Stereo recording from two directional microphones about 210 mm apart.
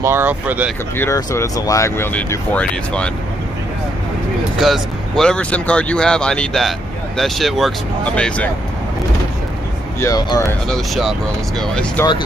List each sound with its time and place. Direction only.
0.0 s speech: 10° right (ahead or behind)
0.9 s speech: 10° left (ahead or behind)
4.6 s speech: centre (ahead or behind)
9.9 s speech: 15° left (ahead or behind)
10.7 s speech: centre (ahead or behind)